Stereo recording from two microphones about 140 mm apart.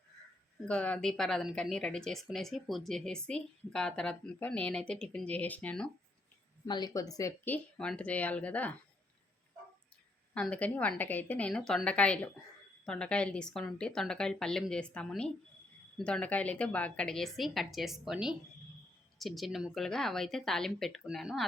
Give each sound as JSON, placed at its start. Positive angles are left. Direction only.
{"t": 0.7, "sound": "speech", "side_deg": 10}
{"t": 6.7, "sound": "speech", "side_deg": 30}
{"t": 7.4, "sound": "a woman's voice", "side_deg": 10}
{"t": 10.3, "sound": "a woman's voice", "side_deg": 10}